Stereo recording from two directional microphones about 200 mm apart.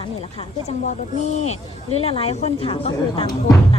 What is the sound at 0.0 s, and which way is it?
A woman's voice, 30° left (ahead or behind).